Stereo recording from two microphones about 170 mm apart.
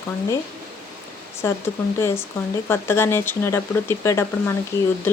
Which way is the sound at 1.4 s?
15° left (ahead or behind).